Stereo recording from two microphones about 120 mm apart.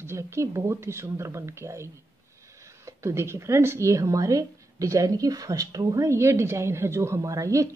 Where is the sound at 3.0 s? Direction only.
20° right (ahead or behind).